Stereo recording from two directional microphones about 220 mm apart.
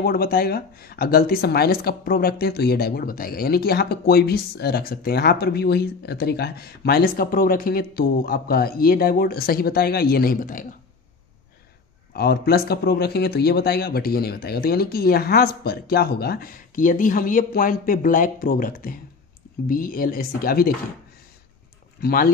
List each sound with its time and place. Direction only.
0.0 s speech: 45° left (ahead or behind)
12.1 s speech: 45° left (ahead or behind)
22.0 s speech: 40° left (ahead or behind)